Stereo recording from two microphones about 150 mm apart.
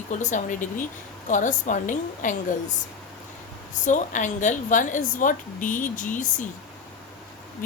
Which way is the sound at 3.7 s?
55° left (ahead or behind).